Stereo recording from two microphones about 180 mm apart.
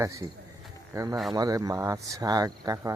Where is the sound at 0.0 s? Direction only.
15° right (ahead or behind).